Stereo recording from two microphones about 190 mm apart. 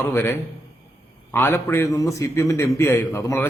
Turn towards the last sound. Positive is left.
turn(degrees=15)  # may be behind; listen again after turning